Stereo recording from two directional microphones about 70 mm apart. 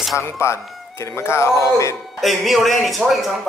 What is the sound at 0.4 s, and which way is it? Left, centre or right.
Speech, left.